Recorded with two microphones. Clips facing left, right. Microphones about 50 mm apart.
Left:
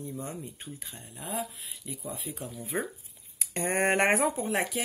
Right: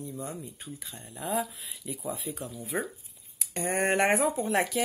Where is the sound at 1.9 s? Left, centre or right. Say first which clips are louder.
Right 4 dB; centre.